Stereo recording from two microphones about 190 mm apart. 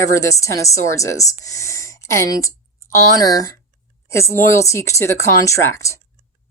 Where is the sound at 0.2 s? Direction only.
15° left (ahead or behind).